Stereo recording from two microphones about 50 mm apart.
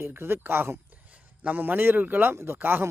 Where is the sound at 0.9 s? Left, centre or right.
Right.